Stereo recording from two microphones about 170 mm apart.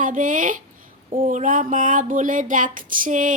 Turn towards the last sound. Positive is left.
turn(degrees=-50)  # may be behind; listen again after turning